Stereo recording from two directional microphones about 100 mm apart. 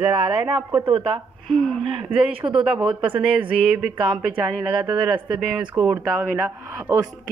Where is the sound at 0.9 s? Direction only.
70° right (ahead or behind).